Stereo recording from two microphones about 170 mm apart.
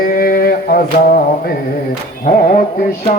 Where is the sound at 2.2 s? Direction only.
50° left (ahead or behind).